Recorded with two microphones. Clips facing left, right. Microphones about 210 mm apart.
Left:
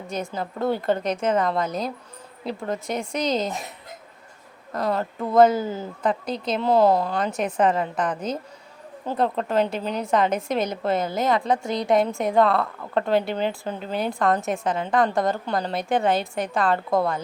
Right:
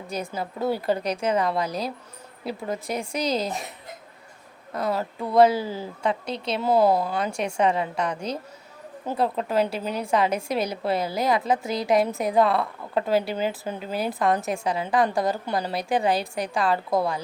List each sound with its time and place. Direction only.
0.3 s a woman's voice: 5° right (ahead or behind)
4.7 s speech: 5° right (ahead or behind)
5.5 s speech: 30° right (ahead or behind)
5.8 s a woman's voice: centre (ahead or behind)
7.3 s a woman's voice: 5° left (ahead or behind)